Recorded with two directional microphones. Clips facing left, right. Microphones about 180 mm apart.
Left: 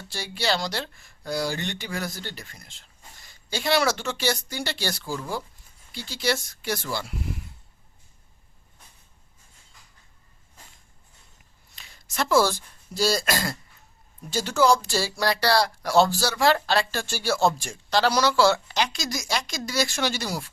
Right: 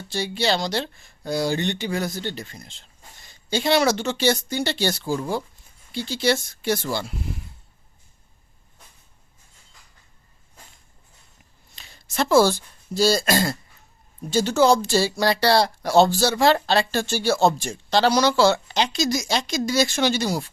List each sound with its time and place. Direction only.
0.1 s speech: 20° right (ahead or behind)
11.7 s speech: 30° right (ahead or behind)